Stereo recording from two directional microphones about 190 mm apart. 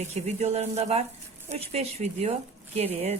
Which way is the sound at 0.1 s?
35° right (ahead or behind).